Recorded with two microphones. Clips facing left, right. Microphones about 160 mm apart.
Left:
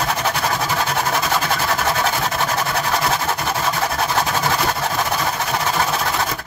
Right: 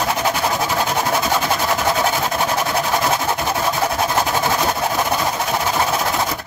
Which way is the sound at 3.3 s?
15° right (ahead or behind).